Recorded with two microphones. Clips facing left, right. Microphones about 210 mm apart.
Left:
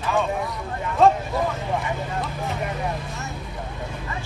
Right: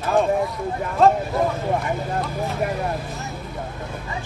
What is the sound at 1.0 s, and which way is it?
Speech, centre (ahead or behind).